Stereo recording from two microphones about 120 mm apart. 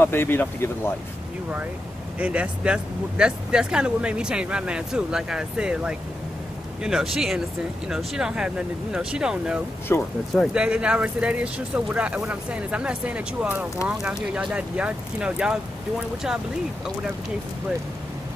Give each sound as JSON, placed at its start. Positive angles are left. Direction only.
{"t": 0.0, "sound": "speech", "side_deg": 20}
{"t": 2.1, "sound": "speech", "side_deg": -10}
{"t": 9.9, "sound": "speech", "side_deg": 20}
{"t": 10.3, "sound": "speech", "side_deg": -5}